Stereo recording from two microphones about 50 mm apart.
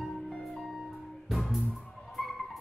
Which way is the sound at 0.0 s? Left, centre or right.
Centre.